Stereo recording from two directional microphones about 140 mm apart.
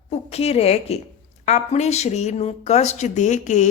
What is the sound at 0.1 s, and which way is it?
A woman's voice, 45° left (ahead or behind).